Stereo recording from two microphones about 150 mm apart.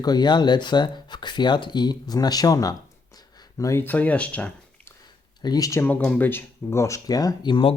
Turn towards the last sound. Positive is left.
turn(degrees=35)  # may be behind; listen again after turning